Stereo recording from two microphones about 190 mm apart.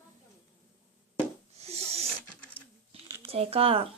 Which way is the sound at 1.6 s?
35° right (ahead or behind).